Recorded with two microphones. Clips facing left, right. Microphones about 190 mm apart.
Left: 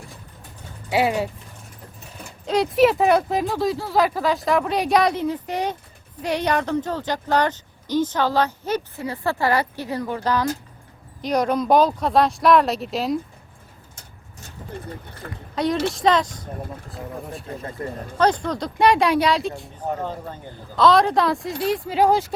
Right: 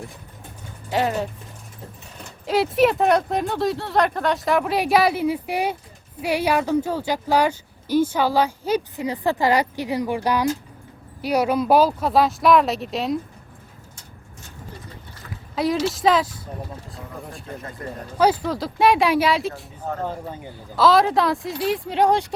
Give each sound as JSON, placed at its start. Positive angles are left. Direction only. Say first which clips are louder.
{"t": 0.9, "sound": "speech", "louder": "left 2 dB", "side_deg": 10}
{"t": 2.5, "sound": "speech", "louder": "left 1 dB", "side_deg": 0}
{"t": 15.3, "sound": "speech", "louder": "even", "side_deg": 0}
{"t": 17.8, "sound": "speech", "louder": "left 4 dB", "side_deg": 30}
{"t": 18.2, "sound": "speech", "louder": "right 1 dB", "side_deg": -5}
{"t": 20.1, "sound": "speech", "louder": "right 1 dB", "side_deg": -10}